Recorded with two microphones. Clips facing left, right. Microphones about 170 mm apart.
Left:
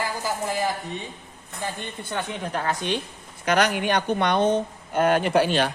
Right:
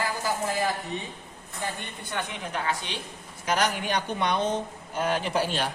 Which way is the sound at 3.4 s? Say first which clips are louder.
Left 5 dB; 70° left (ahead or behind).